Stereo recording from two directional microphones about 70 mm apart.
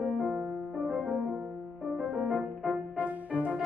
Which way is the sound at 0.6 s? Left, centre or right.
Centre.